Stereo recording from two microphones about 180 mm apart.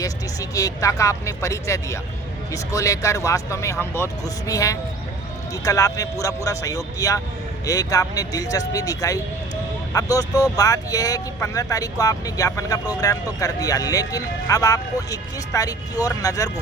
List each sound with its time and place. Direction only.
0.0 s speech: 20° left (ahead or behind)